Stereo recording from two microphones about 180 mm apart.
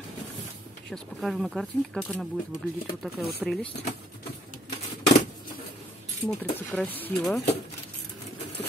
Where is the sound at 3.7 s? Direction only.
35° left (ahead or behind).